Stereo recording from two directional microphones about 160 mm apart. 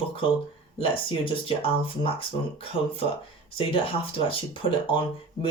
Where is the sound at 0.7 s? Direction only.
35° left (ahead or behind).